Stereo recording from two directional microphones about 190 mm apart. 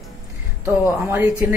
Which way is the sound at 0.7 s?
5° right (ahead or behind).